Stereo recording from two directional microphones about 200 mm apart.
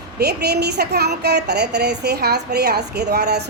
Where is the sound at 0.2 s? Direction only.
55° right (ahead or behind).